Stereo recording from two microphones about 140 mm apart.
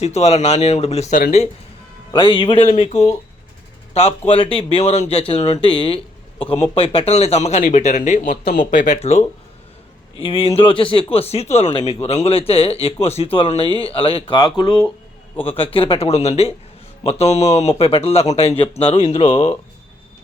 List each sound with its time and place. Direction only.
0.0 s speech: 50° left (ahead or behind)
2.1 s speech: 35° left (ahead or behind)
2.8 s speech: 50° left (ahead or behind)
9.0 s speech: 55° left (ahead or behind)
10.2 s speech: 45° left (ahead or behind)